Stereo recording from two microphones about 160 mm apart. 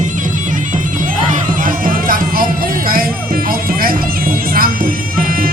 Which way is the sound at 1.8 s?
60° right (ahead or behind).